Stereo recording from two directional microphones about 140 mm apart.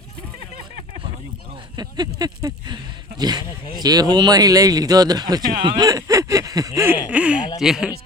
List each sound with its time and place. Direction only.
1.7 s speech: 30° right (ahead or behind); by 7.9 s 5° right (ahead or behind)